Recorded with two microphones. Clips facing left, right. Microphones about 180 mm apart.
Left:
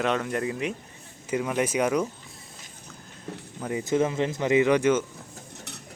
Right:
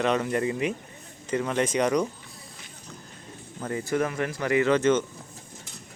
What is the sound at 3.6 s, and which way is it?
Speech, 15° left (ahead or behind).